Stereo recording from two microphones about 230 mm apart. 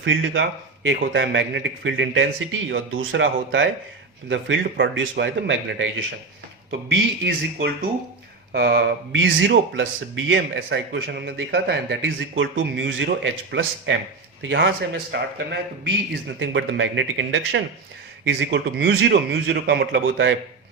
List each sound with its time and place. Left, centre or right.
0.0 s speech: right
16.4 s speech: right